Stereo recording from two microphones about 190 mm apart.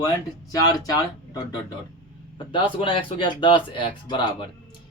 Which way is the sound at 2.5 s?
25° left (ahead or behind).